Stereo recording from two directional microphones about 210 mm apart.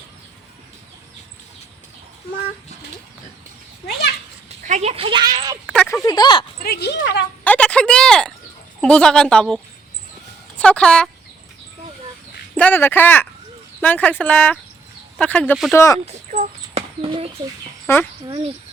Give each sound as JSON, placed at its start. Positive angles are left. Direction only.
{"t": 4.4, "sound": "a sound", "side_deg": -35}
{"t": 5.6, "sound": "a sound", "side_deg": 5}
{"t": 6.0, "sound": "speech", "side_deg": 20}
{"t": 6.6, "sound": "speech", "side_deg": 50}
{"t": 7.4, "sound": "a sound", "side_deg": 5}
{"t": 8.8, "sound": "a woman's voice", "side_deg": 5}
{"t": 10.6, "sound": "a woman's voice", "side_deg": 5}
{"t": 12.5, "sound": "a woman's voice", "side_deg": 10}
{"t": 15.7, "sound": "speech", "side_deg": 15}
{"t": 16.0, "sound": "a sound", "side_deg": -30}
{"t": 17.8, "sound": "speech", "side_deg": 10}
{"t": 18.3, "sound": "speech", "side_deg": -20}